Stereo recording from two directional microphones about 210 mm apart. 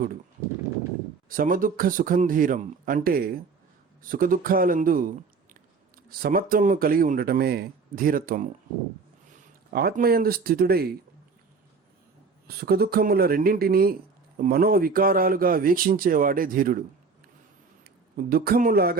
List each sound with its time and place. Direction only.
1.3 s speech: 40° right (ahead or behind)
9.7 s speech: 45° right (ahead or behind)
12.5 s speech: 45° right (ahead or behind)
17.8 s speech: 45° right (ahead or behind)